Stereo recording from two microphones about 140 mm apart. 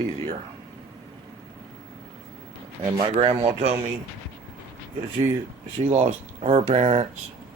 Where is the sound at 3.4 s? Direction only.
45° right (ahead or behind).